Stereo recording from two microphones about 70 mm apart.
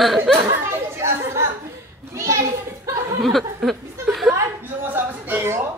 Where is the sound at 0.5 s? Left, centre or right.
Right.